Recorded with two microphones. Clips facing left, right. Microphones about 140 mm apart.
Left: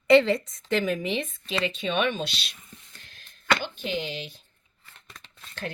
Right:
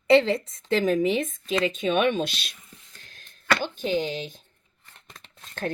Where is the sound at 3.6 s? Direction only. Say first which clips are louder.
Right 5 dB; 40° right (ahead or behind).